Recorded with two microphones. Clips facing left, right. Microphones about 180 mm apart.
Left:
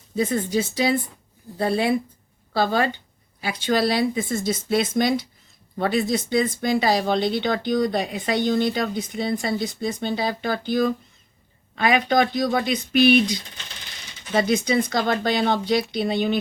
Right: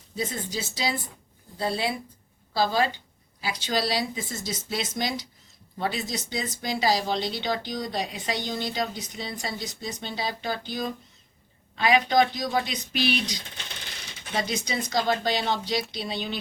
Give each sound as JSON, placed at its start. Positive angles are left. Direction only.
{"t": 0.2, "sound": "speech", "side_deg": 55}